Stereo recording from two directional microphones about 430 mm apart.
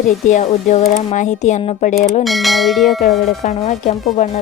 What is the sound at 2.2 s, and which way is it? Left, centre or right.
Church bell, centre.